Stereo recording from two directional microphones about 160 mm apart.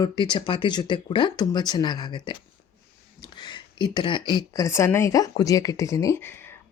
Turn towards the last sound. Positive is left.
turn(degrees=15)  # may be behind; listen again after turning